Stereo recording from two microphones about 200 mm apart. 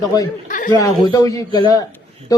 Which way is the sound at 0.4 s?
40° left (ahead or behind).